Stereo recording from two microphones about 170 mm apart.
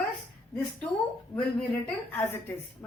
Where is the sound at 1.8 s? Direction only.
10° left (ahead or behind).